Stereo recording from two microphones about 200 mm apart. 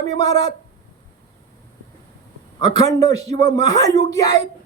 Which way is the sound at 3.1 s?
30° right (ahead or behind).